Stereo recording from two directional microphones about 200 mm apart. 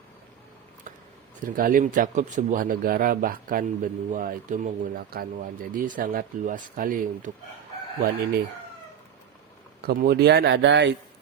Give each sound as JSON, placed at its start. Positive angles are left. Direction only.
{"t": 1.5, "sound": "a man's voice", "side_deg": -45}
{"t": 9.8, "sound": "speech", "side_deg": -50}